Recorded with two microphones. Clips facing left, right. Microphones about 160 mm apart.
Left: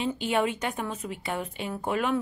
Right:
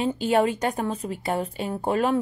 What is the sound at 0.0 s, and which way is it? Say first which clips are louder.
A woman's voice: right 5 dB; 40° right (ahead or behind).